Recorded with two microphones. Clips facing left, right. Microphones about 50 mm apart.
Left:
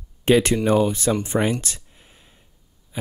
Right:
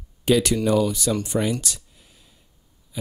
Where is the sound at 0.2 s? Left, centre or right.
Left.